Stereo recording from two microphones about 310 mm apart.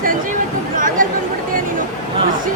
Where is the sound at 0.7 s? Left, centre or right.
Right.